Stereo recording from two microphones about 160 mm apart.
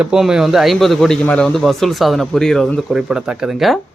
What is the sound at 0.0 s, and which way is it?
A man's voice, 5° right (ahead or behind).